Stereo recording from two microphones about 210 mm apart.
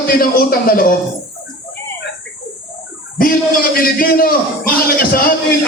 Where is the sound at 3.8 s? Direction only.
45° left (ahead or behind).